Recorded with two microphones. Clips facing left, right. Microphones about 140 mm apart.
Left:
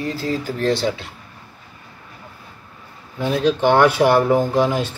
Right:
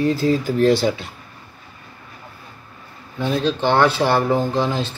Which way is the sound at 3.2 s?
5° left (ahead or behind).